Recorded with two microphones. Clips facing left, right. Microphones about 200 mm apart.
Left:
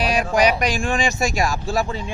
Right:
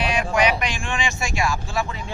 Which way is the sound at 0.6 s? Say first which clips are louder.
Left 6 dB; 40° left (ahead or behind).